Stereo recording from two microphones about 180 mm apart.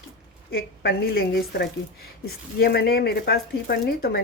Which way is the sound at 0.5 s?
60° left (ahead or behind).